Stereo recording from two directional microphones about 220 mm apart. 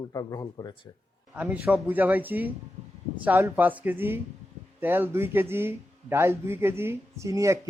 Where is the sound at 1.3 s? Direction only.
5° right (ahead or behind).